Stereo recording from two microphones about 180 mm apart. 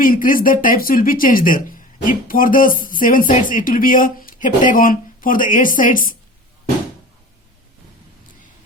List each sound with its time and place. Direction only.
0.0 s speech: 50° left (ahead or behind)